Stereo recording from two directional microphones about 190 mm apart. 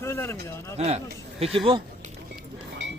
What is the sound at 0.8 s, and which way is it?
A man's voice, 35° right (ahead or behind).